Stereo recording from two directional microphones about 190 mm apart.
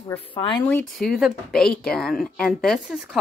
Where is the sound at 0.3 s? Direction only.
25° left (ahead or behind).